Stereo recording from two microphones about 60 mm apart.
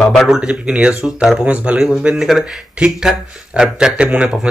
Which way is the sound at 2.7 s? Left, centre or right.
Centre.